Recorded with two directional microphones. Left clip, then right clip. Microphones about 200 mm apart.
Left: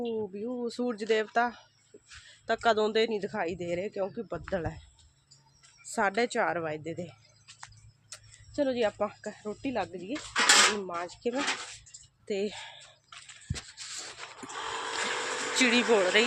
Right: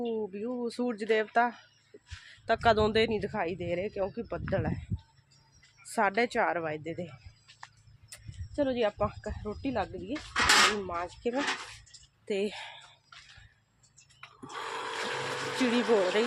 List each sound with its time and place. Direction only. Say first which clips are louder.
0.0 s speech: even; 15° right (ahead or behind)
5.8 s speech: even; 5° right (ahead or behind)
10.1 s speech: left 1 dB; 55° left (ahead or behind)
10.8 s speech: even; 5° right (ahead or behind)
14.4 s a sound: left 1 dB; 40° left (ahead or behind)